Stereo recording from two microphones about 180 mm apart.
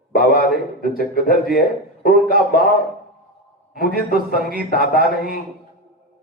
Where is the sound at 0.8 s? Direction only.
55° left (ahead or behind).